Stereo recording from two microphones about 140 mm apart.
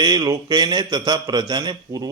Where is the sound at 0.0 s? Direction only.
30° right (ahead or behind).